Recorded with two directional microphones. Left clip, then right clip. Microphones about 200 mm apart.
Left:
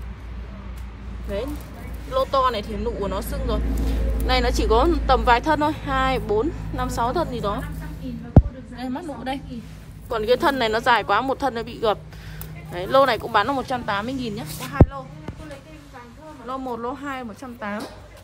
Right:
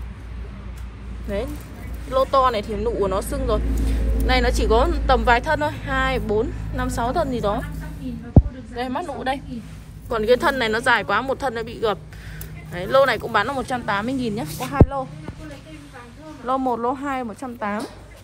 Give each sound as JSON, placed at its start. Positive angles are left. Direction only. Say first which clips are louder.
{"t": 2.0, "sound": "speech", "louder": "right 3 dB", "side_deg": 15}
{"t": 4.3, "sound": "speech", "louder": "right 1 dB", "side_deg": 30}
{"t": 8.7, "sound": "a woman's voice", "louder": "right 5 dB", "side_deg": 5}
{"t": 10.0, "sound": "a woman's voice", "louder": "right 2 dB", "side_deg": 20}
{"t": 14.5, "sound": "a woman's voice", "louder": "right 1 dB", "side_deg": 5}
{"t": 16.4, "sound": "speech", "louder": "right 7 dB", "side_deg": 10}